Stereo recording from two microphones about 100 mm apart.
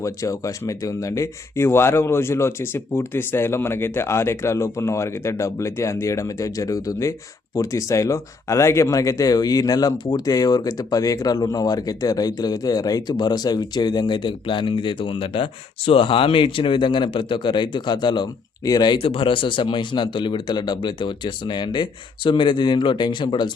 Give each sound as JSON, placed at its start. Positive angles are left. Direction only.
{"t": 0.0, "sound": "speech", "side_deg": 35}
{"t": 18.9, "sound": "speech", "side_deg": 60}